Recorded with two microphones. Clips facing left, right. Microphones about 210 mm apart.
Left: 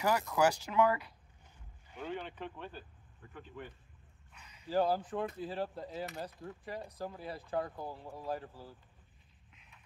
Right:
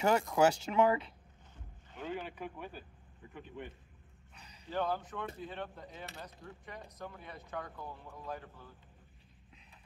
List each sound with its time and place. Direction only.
0.0 s speech: 20° right (ahead or behind)
2.0 s speech: 10° right (ahead or behind)
4.6 s speech: 35° left (ahead or behind)